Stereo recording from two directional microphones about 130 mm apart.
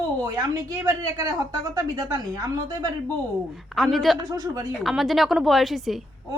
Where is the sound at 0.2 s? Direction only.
30° right (ahead or behind).